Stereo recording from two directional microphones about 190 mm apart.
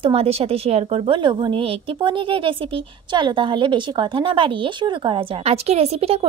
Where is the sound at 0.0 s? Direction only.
30° right (ahead or behind).